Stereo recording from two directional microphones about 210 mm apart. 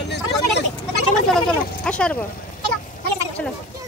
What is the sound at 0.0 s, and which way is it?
Vehicle, 55° left (ahead or behind).